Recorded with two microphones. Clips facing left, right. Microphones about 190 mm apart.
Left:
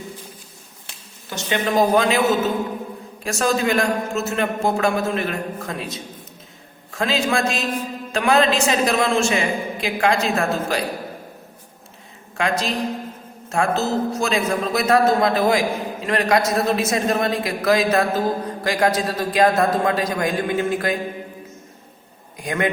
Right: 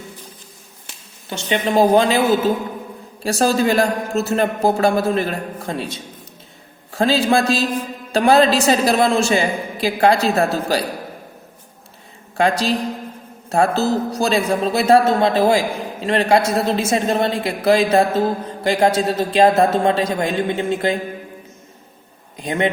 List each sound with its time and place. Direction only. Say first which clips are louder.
1.3 s a man's voice: right 2 dB; 30° right (ahead or behind)
3.2 s a man's voice: right 4 dB; 35° right (ahead or behind)
12.4 s a man's voice: right 4 dB; 35° right (ahead or behind)
22.4 s a man's voice: right 3 dB; 25° right (ahead or behind)